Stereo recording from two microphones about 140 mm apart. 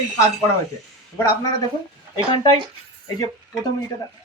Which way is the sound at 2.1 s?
30° left (ahead or behind).